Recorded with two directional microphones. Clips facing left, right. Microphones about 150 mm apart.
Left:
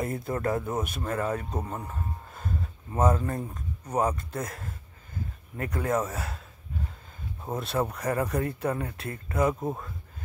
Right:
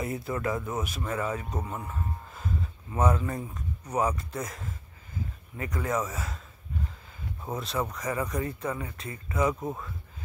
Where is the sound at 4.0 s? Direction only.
50° left (ahead or behind).